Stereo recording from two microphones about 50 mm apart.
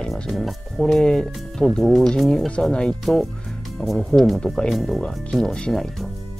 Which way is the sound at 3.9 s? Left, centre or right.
Centre.